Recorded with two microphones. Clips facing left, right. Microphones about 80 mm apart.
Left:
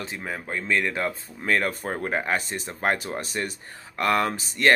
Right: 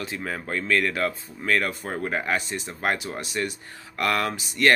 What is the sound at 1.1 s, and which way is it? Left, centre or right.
Speech, left.